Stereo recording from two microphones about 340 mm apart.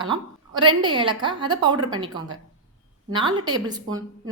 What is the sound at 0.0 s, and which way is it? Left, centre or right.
A woman's voice, centre.